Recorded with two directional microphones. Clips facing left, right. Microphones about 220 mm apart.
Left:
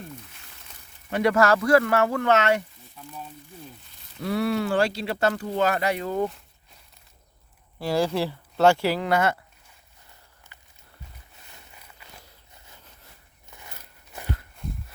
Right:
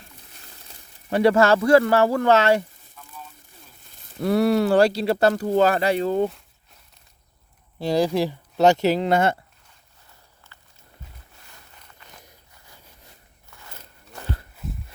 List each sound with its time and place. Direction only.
0.3 s speech: 35° right (ahead or behind)
4.2 s speech: 40° right (ahead or behind)
7.8 s speech: 20° right (ahead or behind)
10.5 s walk: 15° left (ahead or behind)
11.7 s walk: 10° left (ahead or behind)
13.5 s walk: 15° left (ahead or behind)